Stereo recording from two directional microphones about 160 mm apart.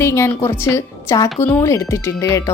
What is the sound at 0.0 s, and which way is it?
A woman's voice, 15° left (ahead or behind).